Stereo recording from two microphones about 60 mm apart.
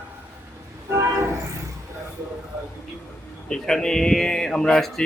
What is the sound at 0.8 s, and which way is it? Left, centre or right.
Train, right.